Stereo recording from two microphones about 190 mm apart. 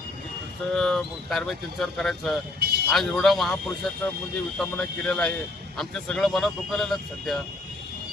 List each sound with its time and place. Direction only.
0.7 s speech: centre (ahead or behind)
2.6 s vehicle: 55° right (ahead or behind)
2.9 s speech: centre (ahead or behind)